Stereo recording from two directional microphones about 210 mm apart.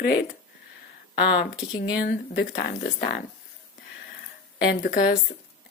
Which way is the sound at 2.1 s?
45° left (ahead or behind).